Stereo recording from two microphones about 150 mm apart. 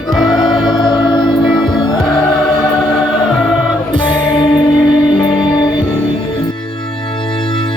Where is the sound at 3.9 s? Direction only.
30° left (ahead or behind).